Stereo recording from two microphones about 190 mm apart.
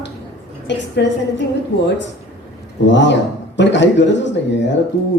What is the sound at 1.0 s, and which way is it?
Speech, 65° left (ahead or behind).